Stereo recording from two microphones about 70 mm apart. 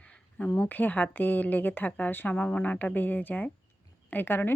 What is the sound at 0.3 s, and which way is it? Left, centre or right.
Speech, centre.